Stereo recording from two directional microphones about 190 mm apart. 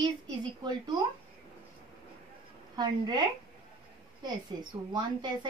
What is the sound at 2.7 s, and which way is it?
Speech, 20° right (ahead or behind).